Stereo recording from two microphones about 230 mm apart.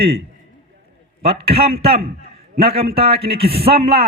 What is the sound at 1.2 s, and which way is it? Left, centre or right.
A man's voice, right.